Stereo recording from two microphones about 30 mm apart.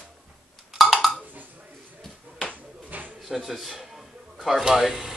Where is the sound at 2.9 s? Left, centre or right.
Right.